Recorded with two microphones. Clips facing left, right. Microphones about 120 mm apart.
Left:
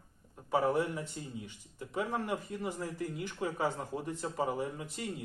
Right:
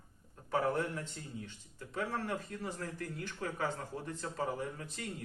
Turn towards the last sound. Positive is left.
turn(degrees=15)  # may be behind; listen again after turning